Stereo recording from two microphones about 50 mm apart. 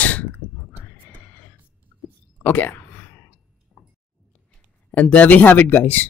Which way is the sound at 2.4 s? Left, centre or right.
Left.